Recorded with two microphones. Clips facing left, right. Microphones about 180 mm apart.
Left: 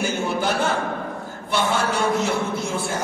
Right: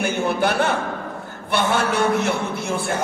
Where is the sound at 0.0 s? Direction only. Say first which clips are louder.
Right 3 dB; 60° right (ahead or behind).